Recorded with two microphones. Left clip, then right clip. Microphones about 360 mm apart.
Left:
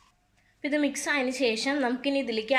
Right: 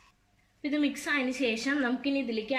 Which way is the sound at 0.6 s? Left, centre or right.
Centre.